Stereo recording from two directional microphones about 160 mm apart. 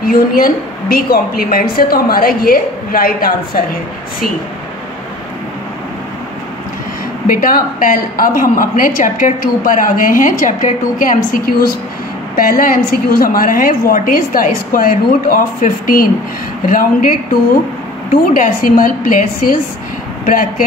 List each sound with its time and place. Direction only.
0.0 s a woman's voice: 65° left (ahead or behind)
7.2 s a woman's voice: 60° left (ahead or behind)
18.1 s a woman's voice: 60° left (ahead or behind)
20.2 s a woman's voice: 60° left (ahead or behind)